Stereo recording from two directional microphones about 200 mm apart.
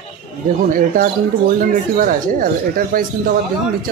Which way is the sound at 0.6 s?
45° right (ahead or behind).